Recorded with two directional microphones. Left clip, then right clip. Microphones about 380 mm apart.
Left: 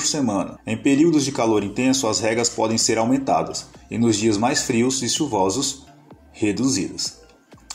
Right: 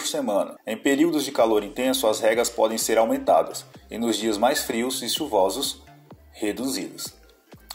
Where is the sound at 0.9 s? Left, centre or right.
Left.